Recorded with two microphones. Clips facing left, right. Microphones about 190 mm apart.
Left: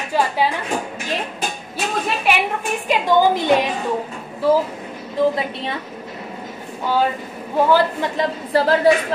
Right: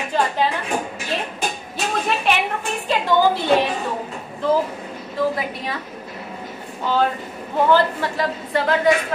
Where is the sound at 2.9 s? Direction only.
15° left (ahead or behind).